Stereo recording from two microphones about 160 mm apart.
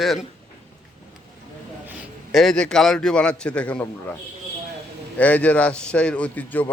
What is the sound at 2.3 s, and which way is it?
A man's voice, centre (ahead or behind).